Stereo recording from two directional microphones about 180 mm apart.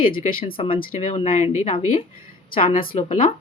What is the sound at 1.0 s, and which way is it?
Speech, 30° left (ahead or behind).